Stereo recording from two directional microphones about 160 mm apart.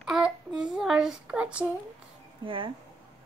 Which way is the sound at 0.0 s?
5° right (ahead or behind).